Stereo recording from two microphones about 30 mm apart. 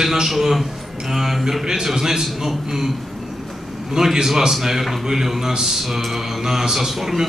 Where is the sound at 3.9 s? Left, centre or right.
Centre.